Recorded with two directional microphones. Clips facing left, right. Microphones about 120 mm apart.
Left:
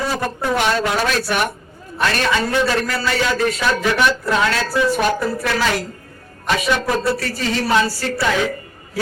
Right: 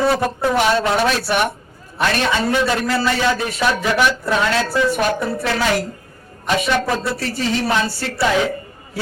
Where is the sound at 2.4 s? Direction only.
25° right (ahead or behind).